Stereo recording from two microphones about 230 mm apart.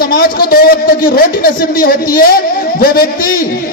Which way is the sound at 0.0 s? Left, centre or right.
Left.